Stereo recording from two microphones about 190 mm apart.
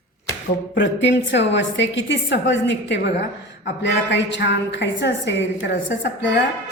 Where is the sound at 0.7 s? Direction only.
70° left (ahead or behind).